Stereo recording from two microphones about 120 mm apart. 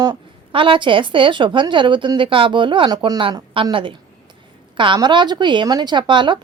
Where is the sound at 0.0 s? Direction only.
40° right (ahead or behind).